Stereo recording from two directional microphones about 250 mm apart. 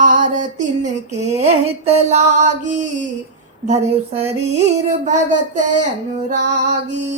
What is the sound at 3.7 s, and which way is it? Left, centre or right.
Music, right.